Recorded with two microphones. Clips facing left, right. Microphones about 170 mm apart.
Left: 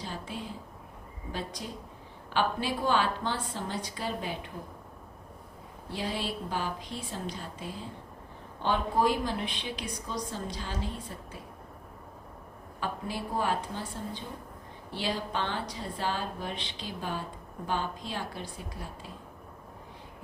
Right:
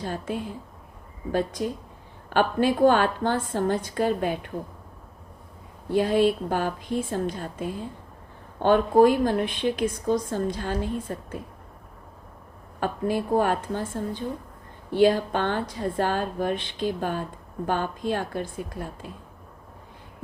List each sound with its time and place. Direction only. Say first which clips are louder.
0.0 s a woman's voice: right 8 dB; 50° right (ahead or behind)
5.9 s a woman's voice: right 13 dB; 50° right (ahead or behind)
12.8 s a woman's voice: right 9 dB; 50° right (ahead or behind)